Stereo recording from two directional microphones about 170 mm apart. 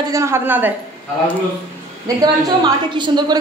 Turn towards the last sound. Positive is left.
turn(degrees=-25)  # may be behind; listen again after turning